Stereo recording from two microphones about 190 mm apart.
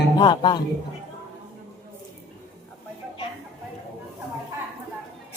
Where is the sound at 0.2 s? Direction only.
20° left (ahead or behind).